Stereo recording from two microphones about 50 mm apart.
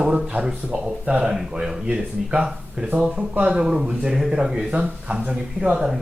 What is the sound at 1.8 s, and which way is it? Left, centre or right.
A man's voice, right.